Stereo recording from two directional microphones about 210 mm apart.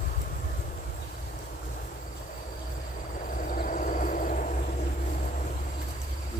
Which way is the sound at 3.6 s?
40° left (ahead or behind).